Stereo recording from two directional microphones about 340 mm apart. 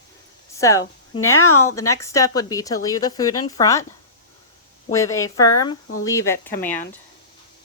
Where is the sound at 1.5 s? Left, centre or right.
Left.